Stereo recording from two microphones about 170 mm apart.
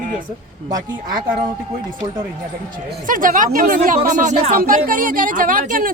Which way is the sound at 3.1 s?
50° right (ahead or behind).